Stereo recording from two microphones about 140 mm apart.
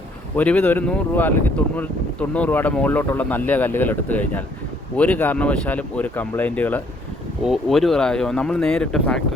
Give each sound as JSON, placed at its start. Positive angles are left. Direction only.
{"t": 0.3, "sound": "speech", "side_deg": 10}
{"t": 7.4, "sound": "speech", "side_deg": 0}